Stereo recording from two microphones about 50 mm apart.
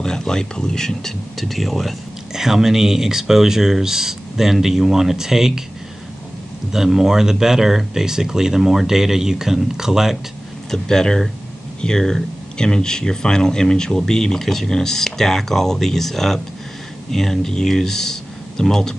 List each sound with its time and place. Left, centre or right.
0.0 s speech: centre
6.7 s speech: centre
10.7 s speech: centre